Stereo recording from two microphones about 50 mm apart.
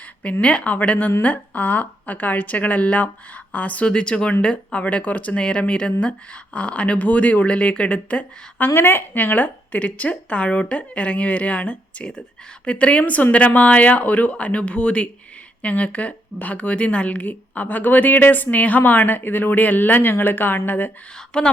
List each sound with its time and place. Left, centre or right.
0.4 s a woman's voice: left
3.8 s speech: centre
8.7 s a woman's voice: left
21.3 s speech: centre